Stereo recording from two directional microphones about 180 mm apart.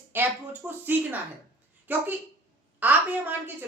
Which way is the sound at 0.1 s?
10° right (ahead or behind).